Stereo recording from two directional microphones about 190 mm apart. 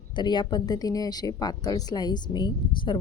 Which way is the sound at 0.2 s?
25° left (ahead or behind).